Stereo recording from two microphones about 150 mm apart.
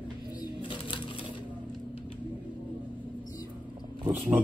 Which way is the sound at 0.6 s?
35° left (ahead or behind).